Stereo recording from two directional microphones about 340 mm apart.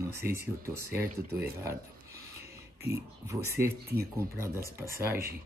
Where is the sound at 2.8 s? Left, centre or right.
Centre.